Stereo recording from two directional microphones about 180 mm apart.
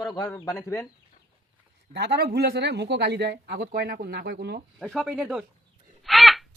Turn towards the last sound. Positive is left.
turn(degrees=0)  # may be behind; listen again after turning